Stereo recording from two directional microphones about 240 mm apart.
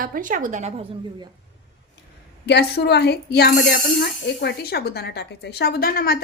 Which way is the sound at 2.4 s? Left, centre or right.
Left.